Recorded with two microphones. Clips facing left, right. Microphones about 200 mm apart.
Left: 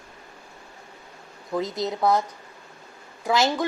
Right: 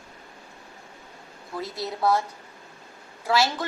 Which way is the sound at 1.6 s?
20° left (ahead or behind).